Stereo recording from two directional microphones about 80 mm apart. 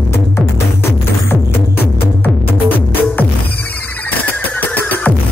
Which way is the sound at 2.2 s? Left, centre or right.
Left.